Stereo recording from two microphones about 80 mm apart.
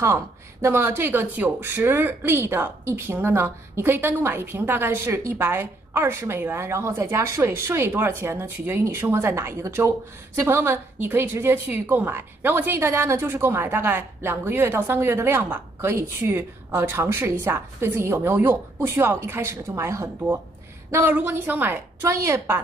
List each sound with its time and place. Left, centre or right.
0.0 s a woman's voice: right
20.9 s speech: right
22.0 s a woman's voice: right